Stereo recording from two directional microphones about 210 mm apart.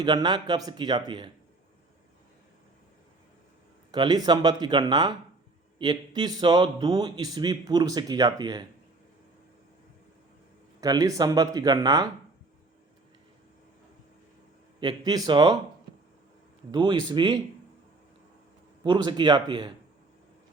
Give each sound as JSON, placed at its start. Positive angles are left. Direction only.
{"t": 0.0, "sound": "a man's voice", "side_deg": -20}
{"t": 3.9, "sound": "a man's voice", "side_deg": -20}
{"t": 10.8, "sound": "speech", "side_deg": -15}
{"t": 14.8, "sound": "a man's voice", "side_deg": -20}
{"t": 16.7, "sound": "a man's voice", "side_deg": -20}
{"t": 18.8, "sound": "a man's voice", "side_deg": -20}